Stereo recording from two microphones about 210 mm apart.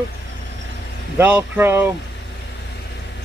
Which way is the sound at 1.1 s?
10° right (ahead or behind).